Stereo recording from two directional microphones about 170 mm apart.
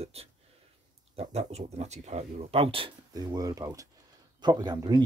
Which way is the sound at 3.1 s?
20° right (ahead or behind).